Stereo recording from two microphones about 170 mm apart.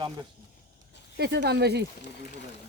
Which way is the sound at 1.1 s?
75° right (ahead or behind).